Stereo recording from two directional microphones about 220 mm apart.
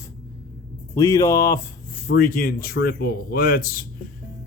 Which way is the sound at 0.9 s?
15° left (ahead or behind).